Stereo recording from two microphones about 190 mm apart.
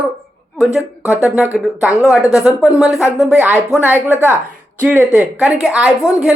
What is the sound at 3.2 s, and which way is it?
Speech, 10° right (ahead or behind).